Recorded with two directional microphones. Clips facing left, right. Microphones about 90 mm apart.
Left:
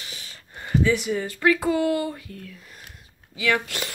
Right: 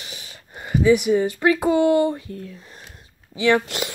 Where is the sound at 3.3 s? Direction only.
25° right (ahead or behind).